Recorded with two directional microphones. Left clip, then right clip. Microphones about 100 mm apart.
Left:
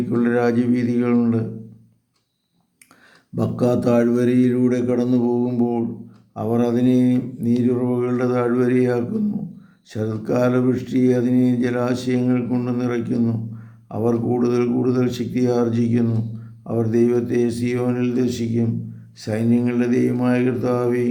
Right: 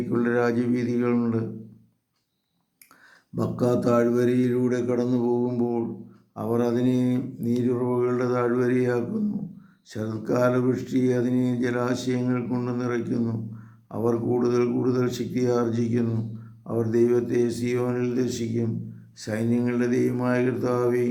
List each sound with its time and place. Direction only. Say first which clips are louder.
0.1 s mantra: left 4 dB; 20° left (ahead or behind)
3.3 s mantra: left 4 dB; 15° left (ahead or behind)